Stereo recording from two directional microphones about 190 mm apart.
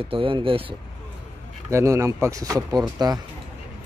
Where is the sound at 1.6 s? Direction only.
15° right (ahead or behind).